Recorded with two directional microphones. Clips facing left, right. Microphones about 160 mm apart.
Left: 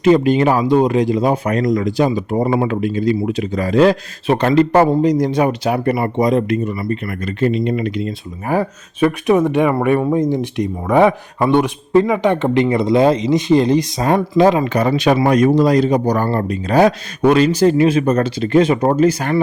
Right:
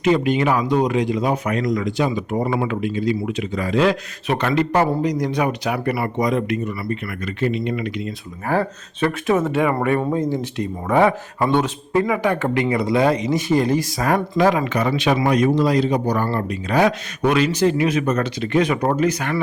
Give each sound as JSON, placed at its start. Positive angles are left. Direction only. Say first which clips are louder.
{"t": 0.0, "sound": "speech", "louder": "left 5 dB", "side_deg": 35}
{"t": 8.4, "sound": "speech", "louder": "left 3 dB", "side_deg": 15}
{"t": 14.6, "sound": "speech", "louder": "left 5 dB", "side_deg": 40}